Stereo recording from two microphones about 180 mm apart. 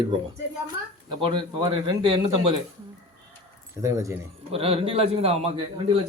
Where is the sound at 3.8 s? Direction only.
15° right (ahead or behind).